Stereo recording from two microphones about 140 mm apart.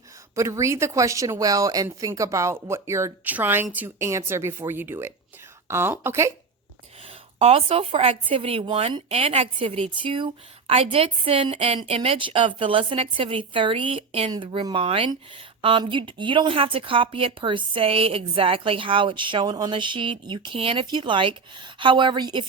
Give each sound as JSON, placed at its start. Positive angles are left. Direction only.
{"t": 0.3, "sound": "speech", "side_deg": -20}
{"t": 7.3, "sound": "a woman's voice", "side_deg": -45}